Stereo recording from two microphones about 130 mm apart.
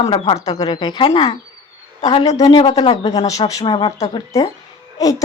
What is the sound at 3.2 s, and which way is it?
Speech, 25° left (ahead or behind).